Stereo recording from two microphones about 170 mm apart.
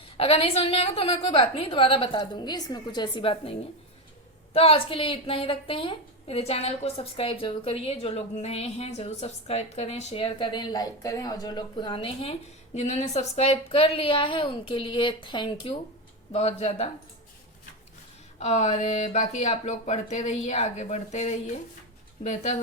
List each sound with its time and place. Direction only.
0.2 s a woman's voice: 35° left (ahead or behind)
18.3 s a woman's voice: 40° left (ahead or behind)